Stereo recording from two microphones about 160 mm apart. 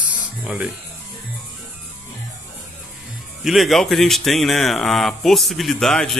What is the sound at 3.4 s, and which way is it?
Speech, centre (ahead or behind).